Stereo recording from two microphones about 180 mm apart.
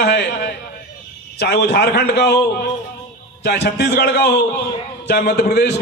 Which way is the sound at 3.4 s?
65° left (ahead or behind).